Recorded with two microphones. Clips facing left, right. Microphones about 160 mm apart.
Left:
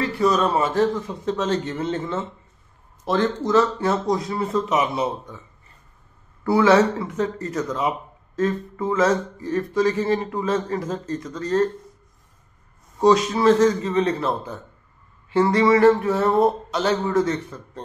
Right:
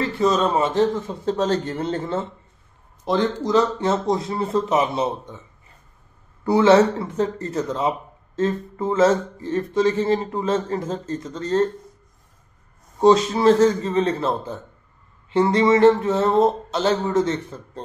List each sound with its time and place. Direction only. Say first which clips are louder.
0.0 s speech: even; 25° right (ahead or behind)
3.1 s speech: even; 15° right (ahead or behind)
6.4 s speech: right 2 dB; 25° right (ahead or behind)
13.0 s speech: right 1 dB; 25° right (ahead or behind)